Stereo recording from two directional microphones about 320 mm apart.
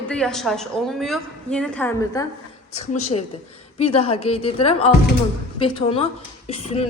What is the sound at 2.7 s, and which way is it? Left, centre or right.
A woman's voice, left.